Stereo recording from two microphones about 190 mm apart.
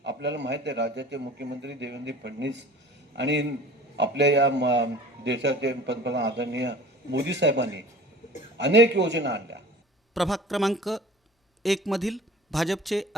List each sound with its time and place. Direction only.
0.0 s a man's voice: 65° right (ahead or behind)
10.2 s speech: centre (ahead or behind)